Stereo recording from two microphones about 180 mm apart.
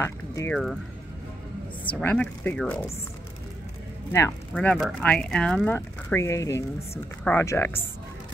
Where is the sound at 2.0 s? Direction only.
10° left (ahead or behind).